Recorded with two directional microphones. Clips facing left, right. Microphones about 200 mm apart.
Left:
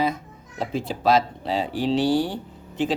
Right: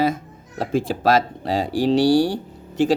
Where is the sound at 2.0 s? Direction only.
75° right (ahead or behind).